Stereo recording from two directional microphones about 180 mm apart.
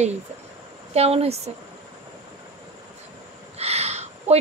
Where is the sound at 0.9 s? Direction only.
35° right (ahead or behind).